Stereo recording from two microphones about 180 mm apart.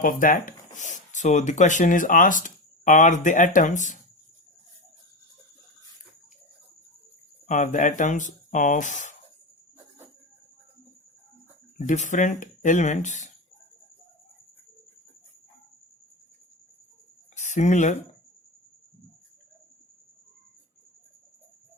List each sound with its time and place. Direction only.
0.0 s speech: 50° left (ahead or behind)
7.4 s speech: 40° left (ahead or behind)
11.9 s speech: 45° left (ahead or behind)
17.3 s speech: 40° left (ahead or behind)